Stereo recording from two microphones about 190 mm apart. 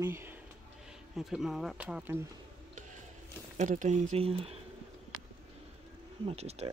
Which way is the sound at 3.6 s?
40° right (ahead or behind).